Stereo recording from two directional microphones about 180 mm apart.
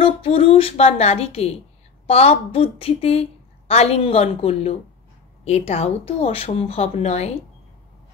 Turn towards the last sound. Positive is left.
turn(degrees=35)  # may be behind; listen again after turning